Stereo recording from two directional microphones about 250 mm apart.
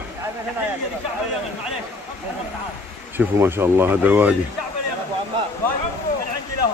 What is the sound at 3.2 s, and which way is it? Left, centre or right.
Speech, centre.